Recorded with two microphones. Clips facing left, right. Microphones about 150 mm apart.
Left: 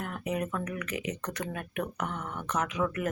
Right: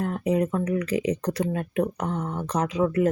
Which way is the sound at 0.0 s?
30° right (ahead or behind).